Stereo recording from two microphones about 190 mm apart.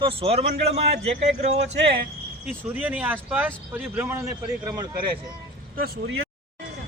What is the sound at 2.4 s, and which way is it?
Speech, 10° right (ahead or behind).